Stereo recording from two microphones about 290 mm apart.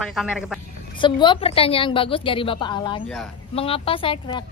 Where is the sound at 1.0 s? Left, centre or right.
Centre.